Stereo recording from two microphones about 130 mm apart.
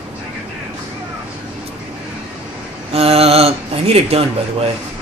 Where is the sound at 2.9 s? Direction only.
50° right (ahead or behind).